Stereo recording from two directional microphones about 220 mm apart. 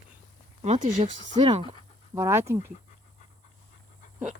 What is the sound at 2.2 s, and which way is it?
Speech, 10° right (ahead or behind).